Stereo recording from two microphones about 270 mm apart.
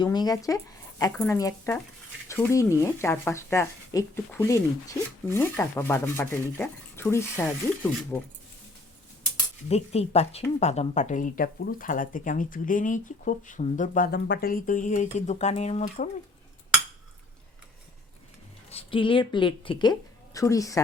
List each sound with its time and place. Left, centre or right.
0.0 s speech: centre
9.6 s speech: left
18.7 s speech: left